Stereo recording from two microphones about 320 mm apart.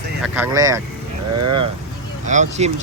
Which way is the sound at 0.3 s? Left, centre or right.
Centre.